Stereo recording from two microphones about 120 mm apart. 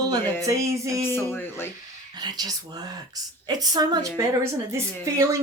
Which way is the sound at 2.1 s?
35° right (ahead or behind).